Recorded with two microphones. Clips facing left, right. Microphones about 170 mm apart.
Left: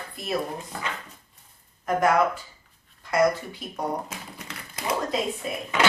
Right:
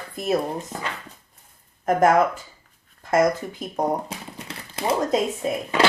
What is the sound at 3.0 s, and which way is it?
Speech, 50° right (ahead or behind).